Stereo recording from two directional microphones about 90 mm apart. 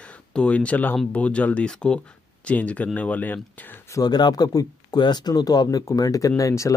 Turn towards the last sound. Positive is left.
turn(degrees=35)  # may be behind; listen again after turning